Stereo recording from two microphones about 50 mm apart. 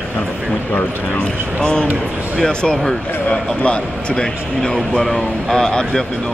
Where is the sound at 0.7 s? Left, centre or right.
Left.